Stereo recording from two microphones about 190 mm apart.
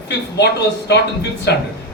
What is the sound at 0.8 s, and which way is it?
Speech, 60° left (ahead or behind).